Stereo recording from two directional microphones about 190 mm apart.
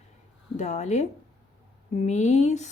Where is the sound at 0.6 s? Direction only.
35° left (ahead or behind).